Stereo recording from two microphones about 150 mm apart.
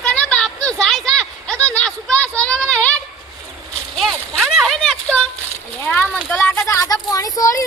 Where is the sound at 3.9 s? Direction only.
Centre (ahead or behind).